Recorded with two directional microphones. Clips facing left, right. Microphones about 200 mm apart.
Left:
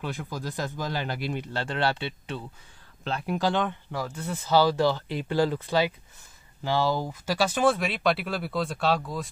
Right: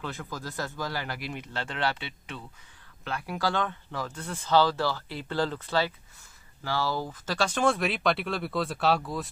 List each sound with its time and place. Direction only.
0.0 s speech: 15° left (ahead or behind); by 9.3 s centre (ahead or behind)